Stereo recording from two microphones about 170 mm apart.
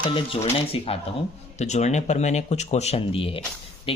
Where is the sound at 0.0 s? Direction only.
30° left (ahead or behind).